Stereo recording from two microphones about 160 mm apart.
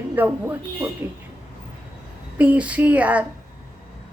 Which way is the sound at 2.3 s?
10° right (ahead or behind).